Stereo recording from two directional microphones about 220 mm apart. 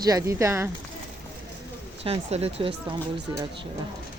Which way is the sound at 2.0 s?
25° right (ahead or behind).